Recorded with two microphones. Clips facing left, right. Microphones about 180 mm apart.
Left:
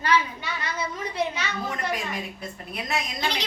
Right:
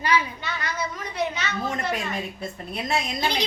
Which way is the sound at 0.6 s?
30° left (ahead or behind).